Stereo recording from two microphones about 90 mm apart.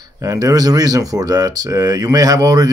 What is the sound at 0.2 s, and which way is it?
Speech, 40° right (ahead or behind).